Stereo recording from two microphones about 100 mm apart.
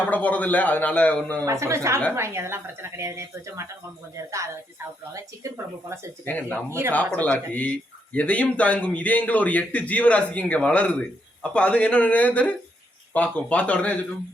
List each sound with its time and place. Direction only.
0.1 s speech: 15° left (ahead or behind)
1.5 s speech: 30° right (ahead or behind)
6.2 s speech: 15° left (ahead or behind)
6.7 s speech: 25° right (ahead or behind)
6.9 s speech: 15° left (ahead or behind)